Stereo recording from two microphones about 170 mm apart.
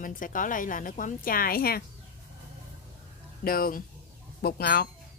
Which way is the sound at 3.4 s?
60° left (ahead or behind).